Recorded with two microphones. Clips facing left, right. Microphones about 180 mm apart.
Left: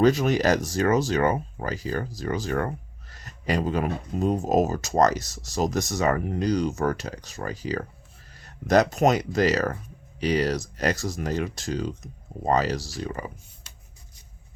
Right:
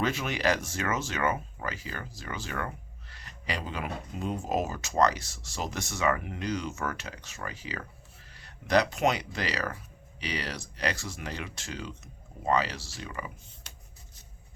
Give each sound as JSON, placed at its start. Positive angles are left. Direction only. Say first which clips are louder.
{"t": 0.0, "sound": "speech", "louder": "left 9 dB", "side_deg": 40}